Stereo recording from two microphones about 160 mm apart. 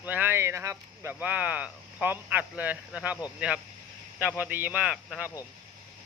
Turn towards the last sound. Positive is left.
turn(degrees=-5)  # may be behind; listen again after turning